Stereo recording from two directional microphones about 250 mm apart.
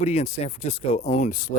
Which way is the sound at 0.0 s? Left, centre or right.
Left.